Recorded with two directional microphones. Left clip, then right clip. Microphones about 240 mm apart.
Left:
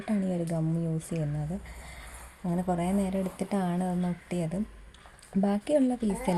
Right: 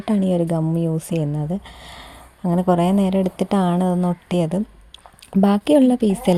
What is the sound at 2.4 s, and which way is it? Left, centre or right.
Speech, right.